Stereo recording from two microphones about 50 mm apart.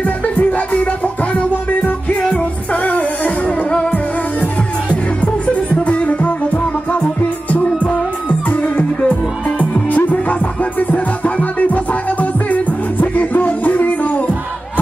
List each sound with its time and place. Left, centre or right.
0.0 s music: left
5.9 s music: left